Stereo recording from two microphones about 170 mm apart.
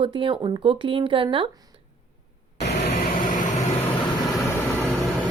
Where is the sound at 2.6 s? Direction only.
80° left.